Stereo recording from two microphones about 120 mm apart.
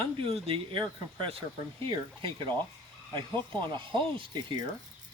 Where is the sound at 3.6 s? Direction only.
40° right (ahead or behind).